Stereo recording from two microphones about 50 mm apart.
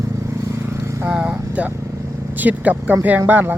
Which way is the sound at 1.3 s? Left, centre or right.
Right.